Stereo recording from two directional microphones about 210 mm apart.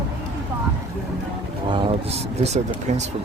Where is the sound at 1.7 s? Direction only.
25° right (ahead or behind).